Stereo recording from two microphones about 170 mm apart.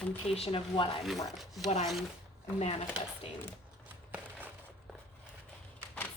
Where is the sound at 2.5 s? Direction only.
35° left (ahead or behind).